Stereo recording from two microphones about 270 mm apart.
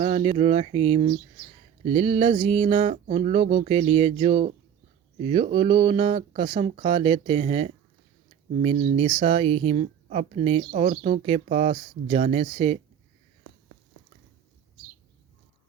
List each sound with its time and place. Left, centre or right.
0.0 s speech: right